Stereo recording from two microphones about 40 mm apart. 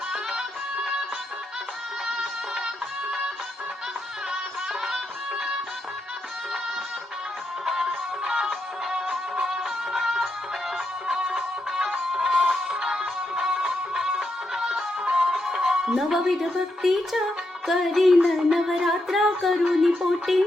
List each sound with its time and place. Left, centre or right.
0.1 s music: centre
2.0 s music: centre
7.6 s music: centre
11.3 s music: centre
15.0 s music: right
15.3 s music: centre
16.0 s a woman's voice: centre